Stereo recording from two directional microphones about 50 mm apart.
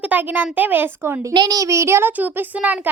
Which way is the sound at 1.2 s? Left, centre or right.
Right.